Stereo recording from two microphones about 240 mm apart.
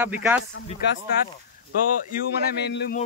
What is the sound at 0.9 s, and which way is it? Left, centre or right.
Speech, left.